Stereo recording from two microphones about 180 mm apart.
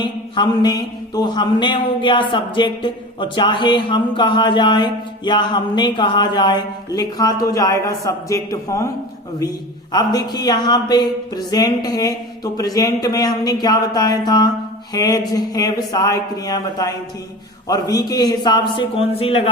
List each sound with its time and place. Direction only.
0.0 s mantra: 25° left (ahead or behind)
1.1 s speech: 25° left (ahead or behind)
9.9 s speech: 20° left (ahead or behind)